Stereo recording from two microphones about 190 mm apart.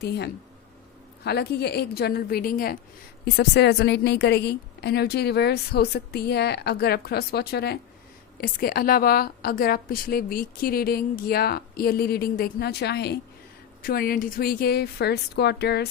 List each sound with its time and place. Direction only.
0.0 s a woman's voice: 60° left (ahead or behind)
3.2 s a woman's voice: 60° left (ahead or behind)